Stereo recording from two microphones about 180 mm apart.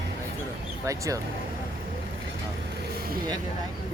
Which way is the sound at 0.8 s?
20° right (ahead or behind).